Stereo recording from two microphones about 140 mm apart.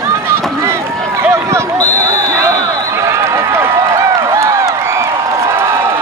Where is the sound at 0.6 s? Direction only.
20° right (ahead or behind).